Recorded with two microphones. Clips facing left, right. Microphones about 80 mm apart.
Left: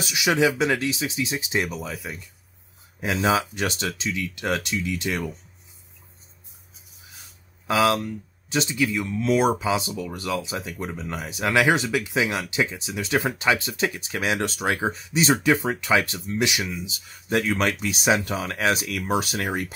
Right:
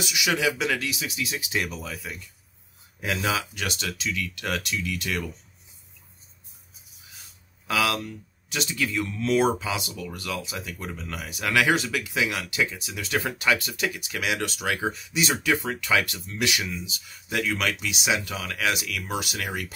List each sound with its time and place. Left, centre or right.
0.0 s speech: left
7.6 s speech: left
8.8 s speech: centre; by 19.7 s left